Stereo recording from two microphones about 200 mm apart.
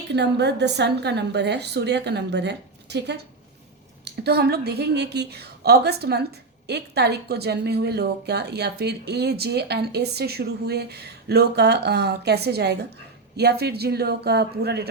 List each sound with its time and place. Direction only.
0.1 s a woman's voice: 60° right (ahead or behind)